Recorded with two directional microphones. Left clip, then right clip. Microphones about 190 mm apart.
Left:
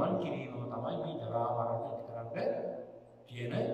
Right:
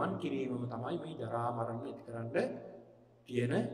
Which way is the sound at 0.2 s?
45° right (ahead or behind).